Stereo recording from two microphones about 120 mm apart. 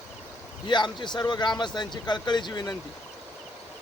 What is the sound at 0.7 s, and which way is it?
Speech, 40° left (ahead or behind).